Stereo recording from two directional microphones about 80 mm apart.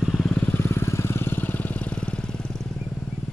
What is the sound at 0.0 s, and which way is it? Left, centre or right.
Vehicle, centre.